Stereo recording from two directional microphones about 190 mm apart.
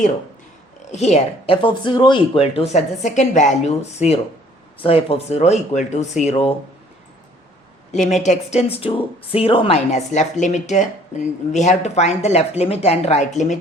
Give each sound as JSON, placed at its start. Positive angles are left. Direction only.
{"t": 0.9, "sound": "speech", "side_deg": 35}
{"t": 7.9, "sound": "speech", "side_deg": 40}